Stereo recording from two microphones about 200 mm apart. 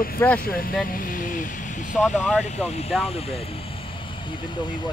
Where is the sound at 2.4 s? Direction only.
30° left (ahead or behind).